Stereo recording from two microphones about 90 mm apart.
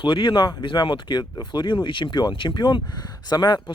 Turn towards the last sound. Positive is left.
turn(degrees=55)  # may be behind; listen again after turning